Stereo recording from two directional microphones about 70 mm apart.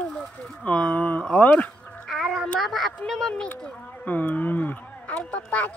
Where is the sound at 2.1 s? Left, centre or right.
Centre.